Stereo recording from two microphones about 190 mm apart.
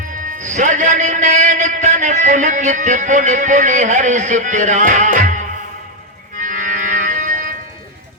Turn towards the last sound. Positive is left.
turn(degrees=-45)  # may be behind; listen again after turning